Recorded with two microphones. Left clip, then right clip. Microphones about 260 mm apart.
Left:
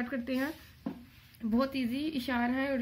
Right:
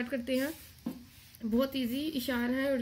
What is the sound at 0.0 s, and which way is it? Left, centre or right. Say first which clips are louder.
A woman's voice: right 2 dB; centre.